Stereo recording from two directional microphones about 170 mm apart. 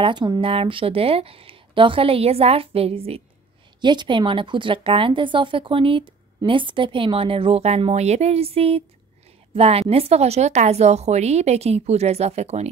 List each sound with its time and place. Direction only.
0.0 s a woman's voice: 25° right (ahead or behind)